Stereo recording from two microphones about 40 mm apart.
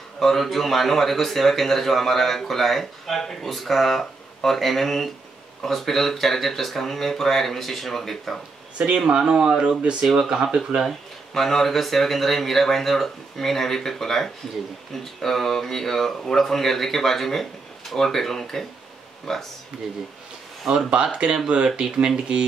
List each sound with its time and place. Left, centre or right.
0.2 s a man's voice: centre
8.7 s speech: right
10.9 s speech: centre
20.9 s speech: right